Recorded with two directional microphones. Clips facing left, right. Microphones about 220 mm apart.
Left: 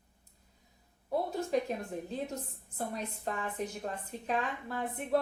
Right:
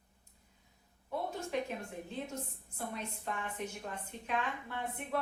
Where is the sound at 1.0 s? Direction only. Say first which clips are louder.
Left 6 dB; 35° left (ahead or behind).